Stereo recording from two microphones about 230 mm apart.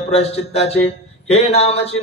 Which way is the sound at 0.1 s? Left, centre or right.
Left.